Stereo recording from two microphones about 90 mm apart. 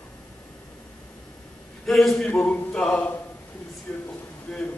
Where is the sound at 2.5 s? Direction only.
10° left (ahead or behind).